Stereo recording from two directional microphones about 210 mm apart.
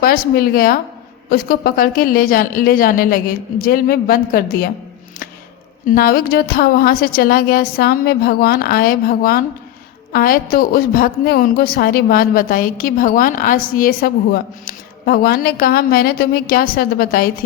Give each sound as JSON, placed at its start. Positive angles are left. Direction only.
{"t": 0.0, "sound": "a woman's voice", "side_deg": 45}
{"t": 5.8, "sound": "a woman's voice", "side_deg": 45}